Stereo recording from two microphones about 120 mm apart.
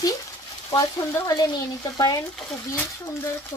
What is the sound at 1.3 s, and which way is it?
Speech, 30° left (ahead or behind).